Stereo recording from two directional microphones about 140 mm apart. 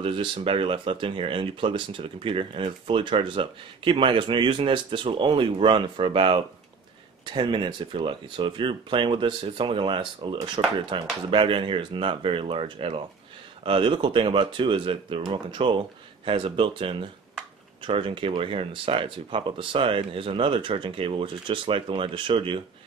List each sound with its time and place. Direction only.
0.0 s speech: 40° right (ahead or behind)